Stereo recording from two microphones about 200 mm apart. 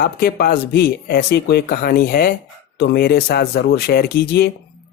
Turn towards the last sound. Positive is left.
turn(degrees=55)  # may be behind; listen again after turning